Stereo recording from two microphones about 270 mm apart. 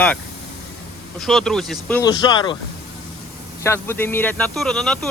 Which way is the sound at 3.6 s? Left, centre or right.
Centre.